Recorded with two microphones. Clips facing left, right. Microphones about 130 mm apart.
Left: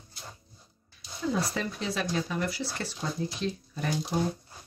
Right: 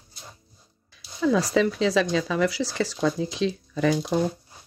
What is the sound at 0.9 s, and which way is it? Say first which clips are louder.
Speech: right 9 dB; 90° right.